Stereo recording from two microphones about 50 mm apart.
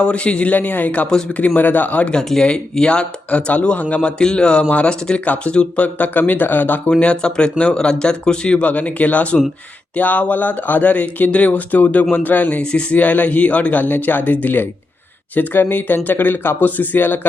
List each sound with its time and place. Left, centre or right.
0.0 s speech: left
2.1 s speech: centre
4.2 s speech: centre; by 6.9 s left
7.0 s speech: left